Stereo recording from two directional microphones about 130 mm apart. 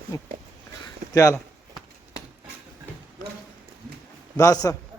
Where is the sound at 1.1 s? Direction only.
25° left (ahead or behind).